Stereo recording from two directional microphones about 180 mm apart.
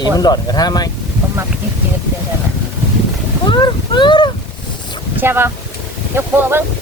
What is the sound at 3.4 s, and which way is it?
Speech, 25° left (ahead or behind).